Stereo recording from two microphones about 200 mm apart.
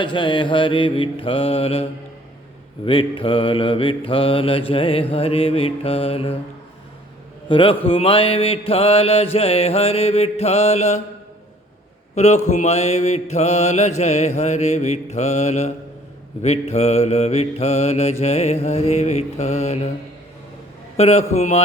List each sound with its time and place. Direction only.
0.0 s mantra: 25° left (ahead or behind)
7.4 s a man's voice: 25° left (ahead or behind)
7.9 s mantra: 30° left (ahead or behind)
12.1 s mantra: 35° left (ahead or behind)
20.9 s mantra: 30° left (ahead or behind)